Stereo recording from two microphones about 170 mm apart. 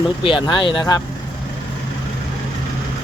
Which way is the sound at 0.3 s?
30° left (ahead or behind).